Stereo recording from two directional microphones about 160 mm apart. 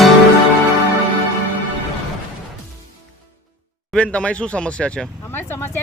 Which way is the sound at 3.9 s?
5° left (ahead or behind).